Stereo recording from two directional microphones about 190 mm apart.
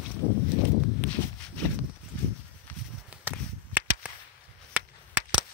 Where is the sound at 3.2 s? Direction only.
10° right (ahead or behind).